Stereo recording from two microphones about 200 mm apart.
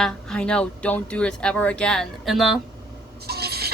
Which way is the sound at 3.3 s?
50° right (ahead or behind).